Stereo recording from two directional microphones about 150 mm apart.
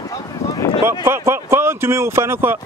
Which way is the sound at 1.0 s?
15° right (ahead or behind).